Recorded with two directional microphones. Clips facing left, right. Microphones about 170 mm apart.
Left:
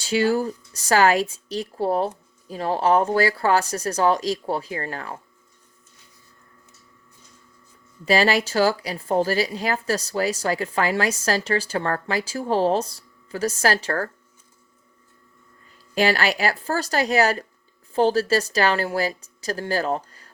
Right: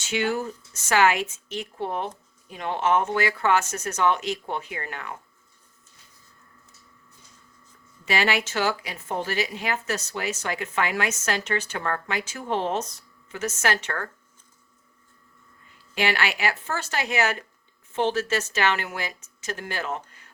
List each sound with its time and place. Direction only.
0.0 s speech: 35° left (ahead or behind)
8.0 s speech: 35° left (ahead or behind)
16.0 s speech: 35° left (ahead or behind)